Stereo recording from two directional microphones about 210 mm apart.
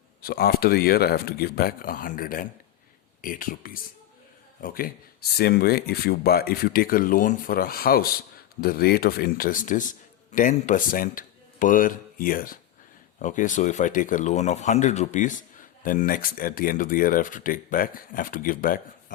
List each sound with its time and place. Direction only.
0.2 s speech: 45° left (ahead or behind)